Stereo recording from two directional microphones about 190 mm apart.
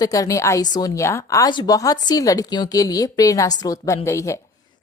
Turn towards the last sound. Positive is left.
turn(degrees=15)  # may be behind; listen again after turning